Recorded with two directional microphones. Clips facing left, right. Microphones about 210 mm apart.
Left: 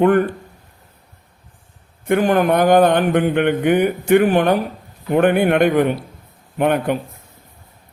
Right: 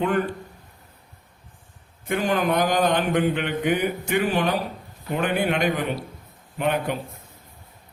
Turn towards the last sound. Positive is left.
turn(degrees=55)  # may be behind; listen again after turning